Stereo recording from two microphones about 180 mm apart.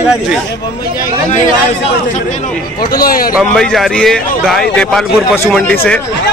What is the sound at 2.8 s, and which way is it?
Speech, 55° left (ahead or behind).